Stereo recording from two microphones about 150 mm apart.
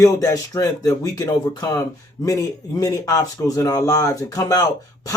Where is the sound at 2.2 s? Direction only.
20° left (ahead or behind).